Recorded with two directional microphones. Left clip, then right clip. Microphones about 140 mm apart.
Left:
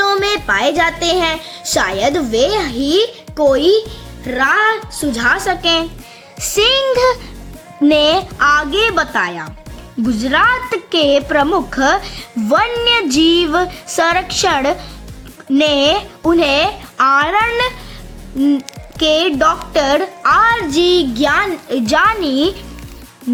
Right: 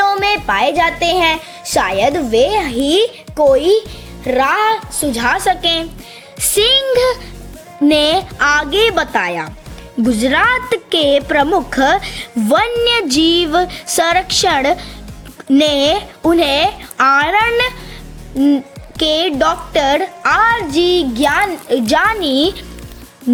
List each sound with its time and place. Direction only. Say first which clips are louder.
0.0 s speech: right 1 dB; 15° right (ahead or behind)
4.3 s a woman's voice: even; 35° right (ahead or behind)
5.0 s speech: even; 25° right (ahead or behind); by 8.2 s 10° right (ahead or behind)
8.4 s speech: right 1 dB; 25° right (ahead or behind)
18.9 s speech: left 1 dB; 30° right (ahead or behind)